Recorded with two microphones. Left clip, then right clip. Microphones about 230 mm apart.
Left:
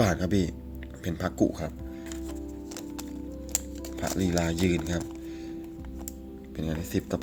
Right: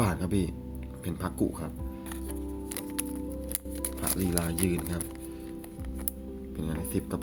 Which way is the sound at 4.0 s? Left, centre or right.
Centre.